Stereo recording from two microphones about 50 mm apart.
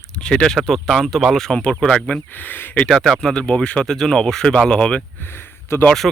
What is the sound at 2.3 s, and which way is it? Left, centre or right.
Speech, left.